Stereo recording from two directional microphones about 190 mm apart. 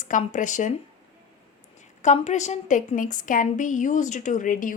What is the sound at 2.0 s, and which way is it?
A woman's voice, 40° left (ahead or behind).